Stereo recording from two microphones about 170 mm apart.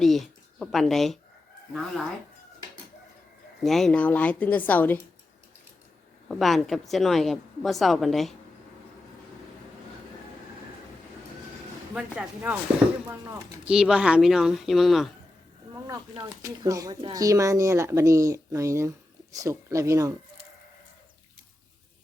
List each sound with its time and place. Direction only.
0.0 s speech: centre (ahead or behind)
3.6 s speech: centre (ahead or behind)
6.2 s a woman's voice: centre (ahead or behind)
11.9 s speech: 5° right (ahead or behind)
13.7 s a woman's voice: 5° right (ahead or behind)
16.4 s speech: 20° right (ahead or behind)